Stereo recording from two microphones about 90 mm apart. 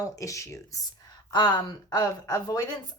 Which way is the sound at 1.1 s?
50° left (ahead or behind).